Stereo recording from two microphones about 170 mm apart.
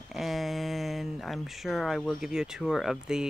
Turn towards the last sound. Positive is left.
turn(degrees=-5)  # may be behind; listen again after turning